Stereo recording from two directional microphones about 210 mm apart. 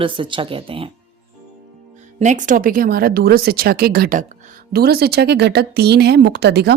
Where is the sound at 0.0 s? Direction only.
25° right (ahead or behind).